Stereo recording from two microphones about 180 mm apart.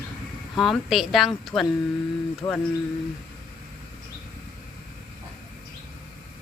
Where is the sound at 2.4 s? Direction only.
20° left (ahead or behind).